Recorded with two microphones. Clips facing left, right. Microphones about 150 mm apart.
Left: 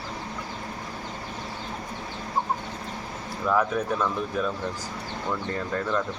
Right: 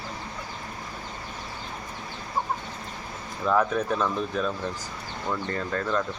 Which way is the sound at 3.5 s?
20° right (ahead or behind).